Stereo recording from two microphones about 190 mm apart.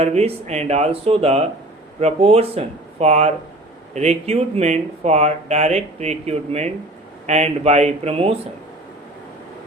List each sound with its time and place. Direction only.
0.0 s speech: 35° right (ahead or behind)